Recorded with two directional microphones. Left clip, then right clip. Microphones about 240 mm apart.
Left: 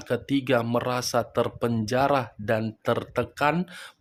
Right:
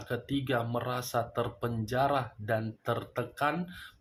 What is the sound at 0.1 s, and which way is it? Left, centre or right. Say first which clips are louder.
Speech: left 8 dB; left.